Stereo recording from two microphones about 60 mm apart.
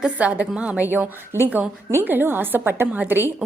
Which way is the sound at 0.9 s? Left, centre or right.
Right.